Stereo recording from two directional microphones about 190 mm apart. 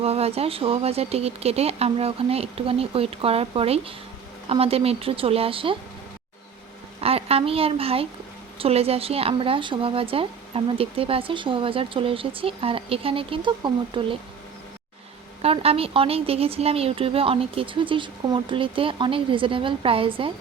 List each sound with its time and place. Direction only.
0.0 s a woman's voice: 30° right (ahead or behind)
7.0 s a woman's voice: 30° right (ahead or behind)
15.4 s a woman's voice: 30° right (ahead or behind)